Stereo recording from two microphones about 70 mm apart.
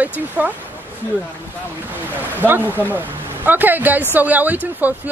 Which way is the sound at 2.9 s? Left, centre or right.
Right.